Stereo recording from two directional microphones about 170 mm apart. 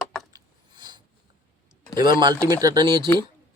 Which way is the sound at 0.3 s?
25° right (ahead or behind).